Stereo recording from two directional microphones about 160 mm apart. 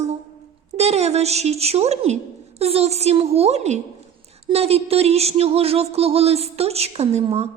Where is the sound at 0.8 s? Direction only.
40° right (ahead or behind).